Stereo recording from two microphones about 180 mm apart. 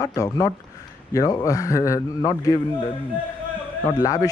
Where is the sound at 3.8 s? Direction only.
20° left (ahead or behind).